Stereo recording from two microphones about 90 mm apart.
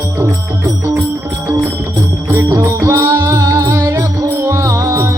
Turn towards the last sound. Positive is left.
turn(degrees=-35)  # may be behind; listen again after turning